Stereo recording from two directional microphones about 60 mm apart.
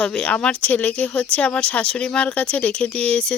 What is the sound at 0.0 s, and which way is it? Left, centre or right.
Speech, centre.